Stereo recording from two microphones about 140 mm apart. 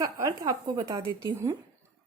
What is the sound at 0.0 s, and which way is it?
Speech, 25° right (ahead or behind).